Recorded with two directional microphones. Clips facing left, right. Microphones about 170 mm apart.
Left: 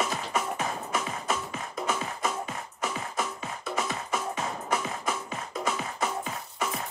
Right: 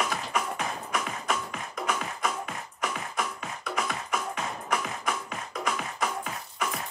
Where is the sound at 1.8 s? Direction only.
25° left (ahead or behind).